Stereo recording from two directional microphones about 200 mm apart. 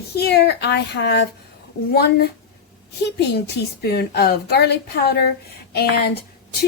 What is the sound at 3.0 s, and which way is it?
A woman's voice, 55° left (ahead or behind).